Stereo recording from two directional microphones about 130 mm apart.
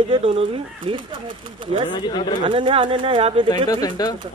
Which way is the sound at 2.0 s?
35° left (ahead or behind).